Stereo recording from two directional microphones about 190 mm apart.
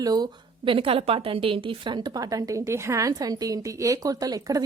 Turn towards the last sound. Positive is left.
turn(degrees=-20)  # may be behind; listen again after turning